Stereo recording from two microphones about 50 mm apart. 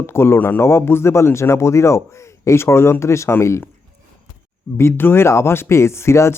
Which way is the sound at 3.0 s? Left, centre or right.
Left.